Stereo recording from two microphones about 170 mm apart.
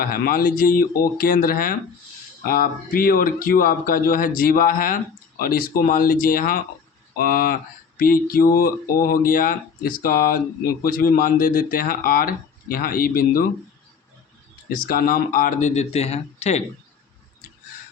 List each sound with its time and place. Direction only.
0.0 s speech: 60° left (ahead or behind)
14.7 s speech: 55° left (ahead or behind); by 16.6 s 40° left (ahead or behind)